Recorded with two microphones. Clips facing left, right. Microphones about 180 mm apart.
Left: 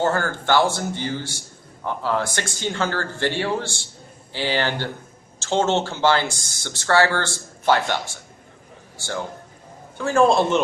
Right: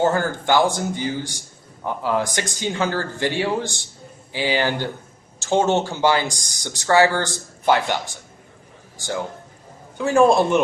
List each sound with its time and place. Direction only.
0.0 s speech: 15° right (ahead or behind)
10.0 s speech: 15° right (ahead or behind)